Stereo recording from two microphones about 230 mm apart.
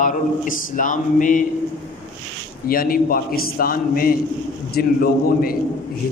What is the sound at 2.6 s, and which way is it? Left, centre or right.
A man's voice, left.